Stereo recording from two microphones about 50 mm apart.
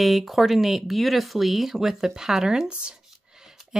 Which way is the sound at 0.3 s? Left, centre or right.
Centre.